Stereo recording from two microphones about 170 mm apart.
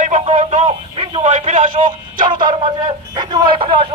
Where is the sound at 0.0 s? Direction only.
45° right (ahead or behind).